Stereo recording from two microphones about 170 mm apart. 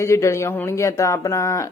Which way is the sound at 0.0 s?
15° left (ahead or behind).